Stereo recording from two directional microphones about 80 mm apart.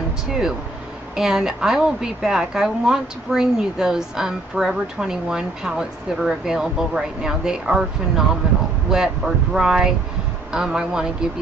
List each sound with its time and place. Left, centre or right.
0.3 s a woman's voice: centre
8.9 s a woman's voice: centre